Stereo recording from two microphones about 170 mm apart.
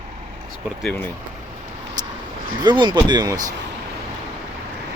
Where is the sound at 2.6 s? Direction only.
25° right (ahead or behind).